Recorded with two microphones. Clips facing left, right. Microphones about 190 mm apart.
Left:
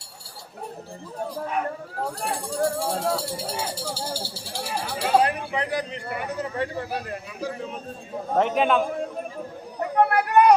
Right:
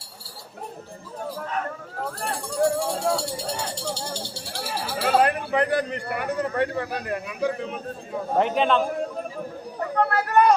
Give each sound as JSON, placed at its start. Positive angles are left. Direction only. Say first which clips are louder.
{"t": 2.2, "sound": "speech", "louder": "right 3 dB", "side_deg": 0}
{"t": 5.0, "sound": "speech", "louder": "right 1 dB", "side_deg": -55}
{"t": 8.4, "sound": "speech", "louder": "even", "side_deg": 0}
{"t": 9.8, "sound": "speech", "louder": "left 3 dB", "side_deg": 20}